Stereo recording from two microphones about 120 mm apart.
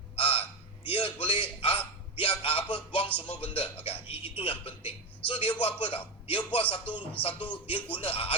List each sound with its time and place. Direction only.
0.2 s honk: 50° left (ahead or behind)
0.9 s a man's voice: 50° left (ahead or behind)